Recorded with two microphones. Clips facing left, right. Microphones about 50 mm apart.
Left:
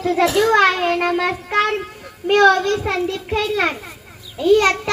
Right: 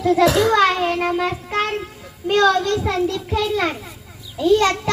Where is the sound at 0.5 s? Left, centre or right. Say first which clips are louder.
Left 2 dB; left.